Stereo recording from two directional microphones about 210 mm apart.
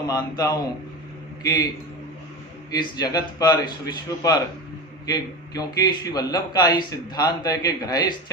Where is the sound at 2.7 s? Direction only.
20° left (ahead or behind).